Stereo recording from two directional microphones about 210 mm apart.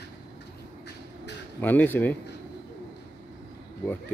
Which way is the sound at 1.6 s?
10° left (ahead or behind).